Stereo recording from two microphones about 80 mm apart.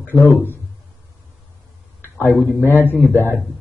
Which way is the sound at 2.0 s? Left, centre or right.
Left.